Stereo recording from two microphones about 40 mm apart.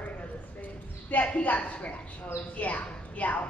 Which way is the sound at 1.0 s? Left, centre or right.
Left.